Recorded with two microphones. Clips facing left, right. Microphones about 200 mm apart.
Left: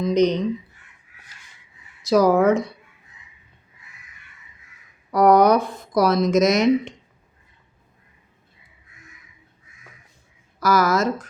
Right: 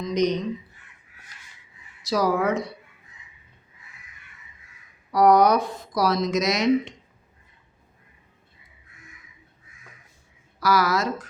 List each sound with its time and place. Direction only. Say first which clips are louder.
0.0 s speech: left 5 dB; 55° left (ahead or behind)
2.0 s speech: left 7 dB; 50° left (ahead or behind)
5.1 s speech: left 2 dB; 55° left (ahead or behind)
10.6 s speech: left 3 dB; 45° left (ahead or behind)